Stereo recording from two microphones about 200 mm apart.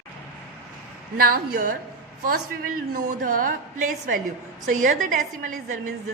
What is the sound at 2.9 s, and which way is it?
A woman's voice, 45° right (ahead or behind).